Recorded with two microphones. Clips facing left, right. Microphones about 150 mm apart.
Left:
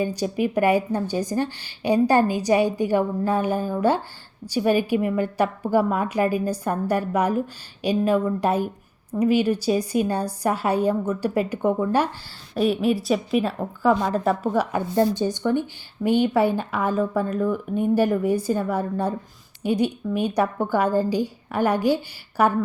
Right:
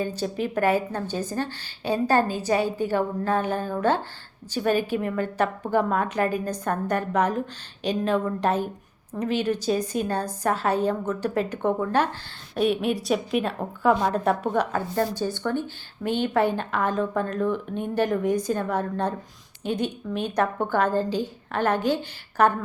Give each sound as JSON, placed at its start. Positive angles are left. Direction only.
{"t": 0.0, "sound": "a woman's voice", "side_deg": 15}
{"t": 14.7, "sound": "a woman's voice", "side_deg": 20}